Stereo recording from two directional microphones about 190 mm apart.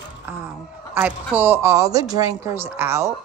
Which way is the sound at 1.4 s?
10° right (ahead or behind).